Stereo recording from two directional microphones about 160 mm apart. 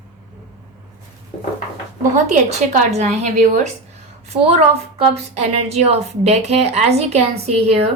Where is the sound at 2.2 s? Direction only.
45° right (ahead or behind).